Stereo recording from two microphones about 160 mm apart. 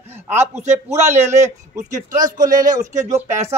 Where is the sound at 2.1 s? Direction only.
20° right (ahead or behind).